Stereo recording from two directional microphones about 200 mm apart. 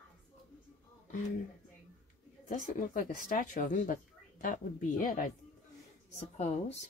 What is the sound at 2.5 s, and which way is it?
Speech, 40° left (ahead or behind).